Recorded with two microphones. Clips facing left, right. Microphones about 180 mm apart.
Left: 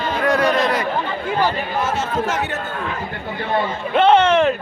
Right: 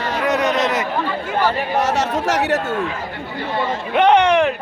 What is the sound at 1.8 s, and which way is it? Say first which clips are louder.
Speech: right 1 dB; 75° right (ahead or behind).